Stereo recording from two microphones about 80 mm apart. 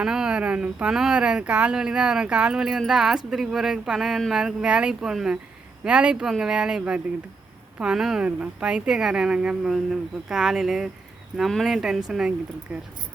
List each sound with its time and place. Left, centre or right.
0.0 s speech: centre
12.7 s speech: centre